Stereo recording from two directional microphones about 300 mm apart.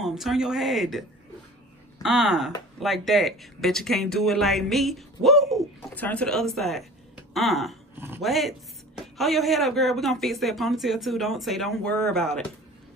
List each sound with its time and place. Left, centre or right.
0.0 s speech: centre
2.0 s speech: centre